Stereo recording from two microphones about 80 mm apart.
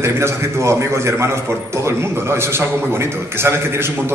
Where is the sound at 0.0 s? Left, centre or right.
Right.